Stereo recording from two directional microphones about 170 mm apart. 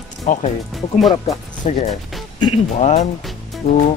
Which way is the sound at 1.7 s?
40° left (ahead or behind).